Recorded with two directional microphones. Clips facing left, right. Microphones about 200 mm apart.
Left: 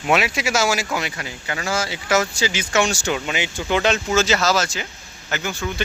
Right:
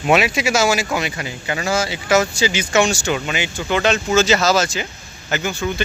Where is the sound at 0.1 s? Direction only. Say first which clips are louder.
Right 3 dB; 15° right (ahead or behind).